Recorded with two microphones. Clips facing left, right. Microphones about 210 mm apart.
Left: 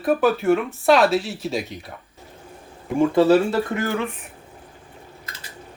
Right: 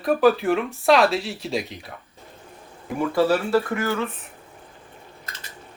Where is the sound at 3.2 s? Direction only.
20° left (ahead or behind).